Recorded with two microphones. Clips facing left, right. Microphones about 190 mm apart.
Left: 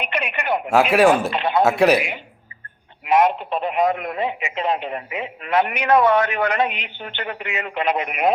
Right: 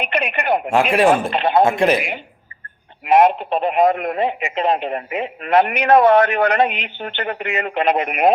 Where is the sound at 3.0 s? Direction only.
55° right (ahead or behind).